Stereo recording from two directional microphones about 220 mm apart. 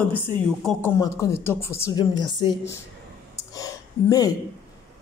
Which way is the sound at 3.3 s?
15° left (ahead or behind).